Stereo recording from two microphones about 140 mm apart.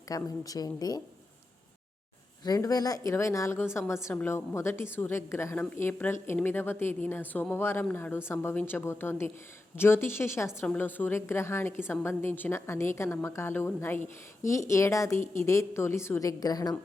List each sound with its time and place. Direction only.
0.1 s a woman's voice: 25° left (ahead or behind)
2.4 s a woman's voice: 25° left (ahead or behind)